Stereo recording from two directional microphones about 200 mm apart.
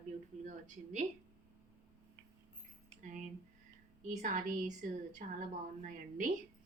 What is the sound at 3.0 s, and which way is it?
Speech, 40° right (ahead or behind).